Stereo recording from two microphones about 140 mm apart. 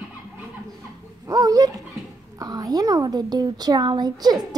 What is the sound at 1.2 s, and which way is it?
A woman's voice, 25° right (ahead or behind).